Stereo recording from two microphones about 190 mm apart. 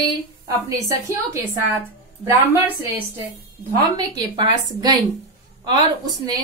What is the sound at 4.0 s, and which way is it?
A woman's voice, 25° right (ahead or behind).